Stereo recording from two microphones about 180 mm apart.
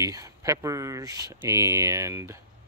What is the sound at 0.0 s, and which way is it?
Speech, 15° right (ahead or behind).